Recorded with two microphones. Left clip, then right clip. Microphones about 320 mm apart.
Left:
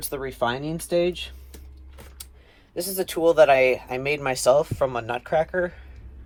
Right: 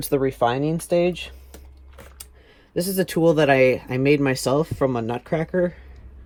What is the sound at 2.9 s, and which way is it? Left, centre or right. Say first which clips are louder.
Speech: right 1 dB; right.